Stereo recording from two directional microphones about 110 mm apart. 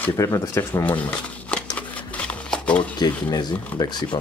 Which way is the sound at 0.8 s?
15° left (ahead or behind).